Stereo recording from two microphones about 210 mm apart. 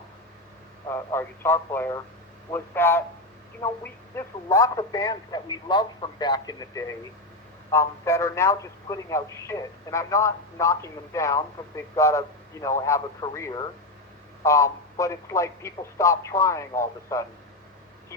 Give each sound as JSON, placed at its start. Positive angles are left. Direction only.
{"t": 0.9, "sound": "speech", "side_deg": 10}